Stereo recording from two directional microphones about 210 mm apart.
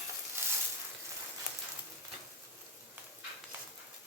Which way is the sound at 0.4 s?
10° right (ahead or behind).